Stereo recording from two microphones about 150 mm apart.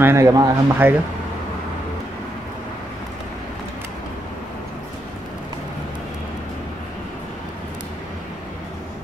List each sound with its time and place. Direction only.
0.0 s speech: 20° right (ahead or behind)